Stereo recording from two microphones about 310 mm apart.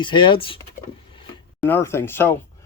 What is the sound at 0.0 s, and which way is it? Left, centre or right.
Speech, centre.